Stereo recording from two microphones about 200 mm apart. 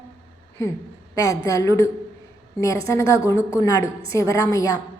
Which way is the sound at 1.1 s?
15° left (ahead or behind).